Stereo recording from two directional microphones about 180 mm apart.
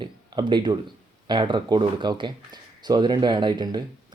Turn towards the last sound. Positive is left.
turn(degrees=-25)  # may be behind; listen again after turning